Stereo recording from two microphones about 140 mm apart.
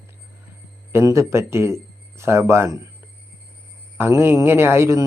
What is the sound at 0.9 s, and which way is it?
Speech, 20° right (ahead or behind).